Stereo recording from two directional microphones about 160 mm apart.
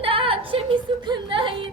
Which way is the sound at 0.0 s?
35° right (ahead or behind).